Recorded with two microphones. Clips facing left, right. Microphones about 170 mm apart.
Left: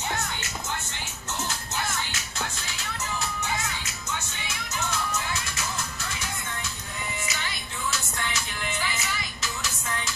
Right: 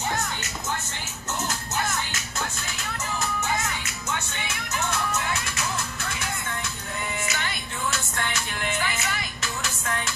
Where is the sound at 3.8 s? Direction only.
60° right (ahead or behind).